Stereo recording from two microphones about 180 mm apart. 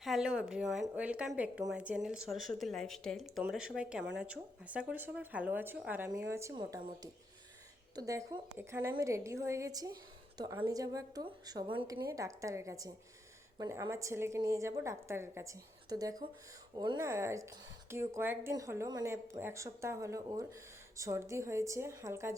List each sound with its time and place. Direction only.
0.0 s a woman's voice: centre (ahead or behind); by 17.0 s 25° right (ahead or behind)
17.0 s a woman's voice: 15° right (ahead or behind)